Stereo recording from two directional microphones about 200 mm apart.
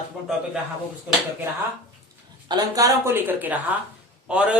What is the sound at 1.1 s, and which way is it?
Speech, 10° right (ahead or behind).